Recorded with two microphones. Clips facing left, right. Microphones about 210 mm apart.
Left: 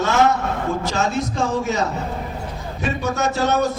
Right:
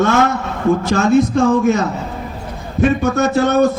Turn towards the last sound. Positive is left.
turn(degrees=-55)  # may be behind; listen again after turning